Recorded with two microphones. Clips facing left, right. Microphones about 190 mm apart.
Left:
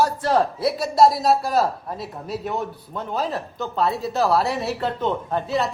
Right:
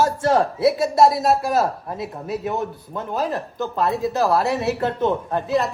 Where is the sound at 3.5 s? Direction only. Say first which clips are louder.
Right 2 dB; 15° right (ahead or behind).